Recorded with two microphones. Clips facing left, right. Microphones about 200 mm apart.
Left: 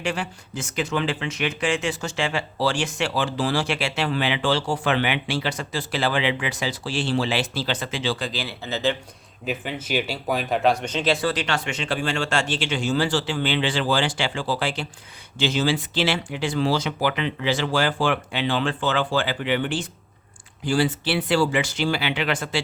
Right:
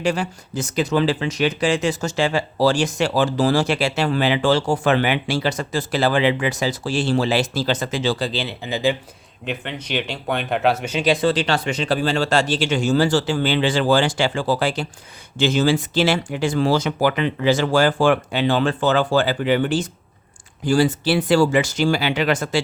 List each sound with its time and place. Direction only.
0.0 s speech: 40° right (ahead or behind)
8.3 s speech: 25° right (ahead or behind)
8.6 s speech: 10° right (ahead or behind)
9.5 s speech: 5° left (ahead or behind); by 11.3 s 15° right (ahead or behind)
11.3 s speech: 30° right (ahead or behind)